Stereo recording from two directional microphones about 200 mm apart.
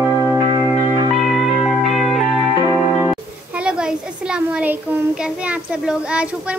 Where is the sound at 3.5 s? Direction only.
5° right (ahead or behind).